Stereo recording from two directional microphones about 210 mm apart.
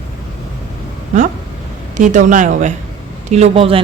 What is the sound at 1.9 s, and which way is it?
Speech, 35° right (ahead or behind).